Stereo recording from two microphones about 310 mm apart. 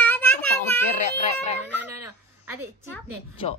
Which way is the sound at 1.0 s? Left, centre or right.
Left.